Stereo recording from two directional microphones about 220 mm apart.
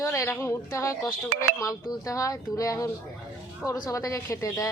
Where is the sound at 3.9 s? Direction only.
15° left (ahead or behind).